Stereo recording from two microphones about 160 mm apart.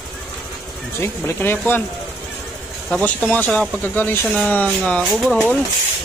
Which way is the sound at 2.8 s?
5° left (ahead or behind).